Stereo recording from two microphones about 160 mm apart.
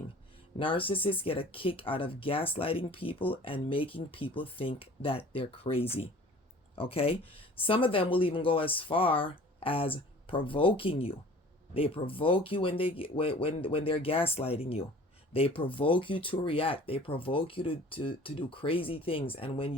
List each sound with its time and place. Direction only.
0.6 s speech: 35° left (ahead or behind)